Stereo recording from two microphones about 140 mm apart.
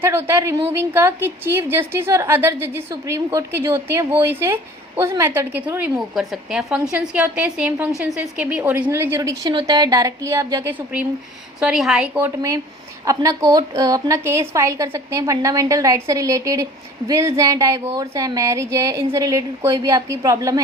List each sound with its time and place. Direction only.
0.0 s a woman's voice: 15° right (ahead or behind)
13.1 s a woman's voice: 25° right (ahead or behind)